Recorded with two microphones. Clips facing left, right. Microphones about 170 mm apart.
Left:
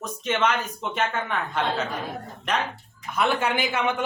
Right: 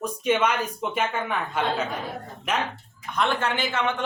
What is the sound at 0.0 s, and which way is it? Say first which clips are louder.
Speech: right 2 dB; 10° right (ahead or behind).